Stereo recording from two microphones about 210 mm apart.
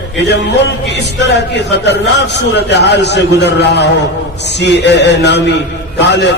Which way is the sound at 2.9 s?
55° left (ahead or behind).